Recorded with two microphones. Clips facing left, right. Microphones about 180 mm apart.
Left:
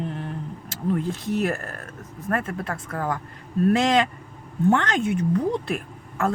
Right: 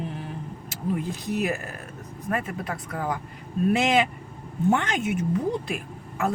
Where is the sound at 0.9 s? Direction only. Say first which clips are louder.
Left 3 dB; centre (ahead or behind).